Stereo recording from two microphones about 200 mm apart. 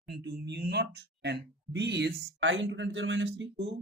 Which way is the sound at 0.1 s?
60° right (ahead or behind).